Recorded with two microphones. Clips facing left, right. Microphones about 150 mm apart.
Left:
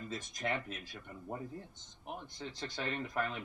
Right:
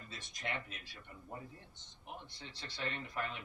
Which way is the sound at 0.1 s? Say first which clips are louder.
Left 5 dB; 45° left (ahead or behind).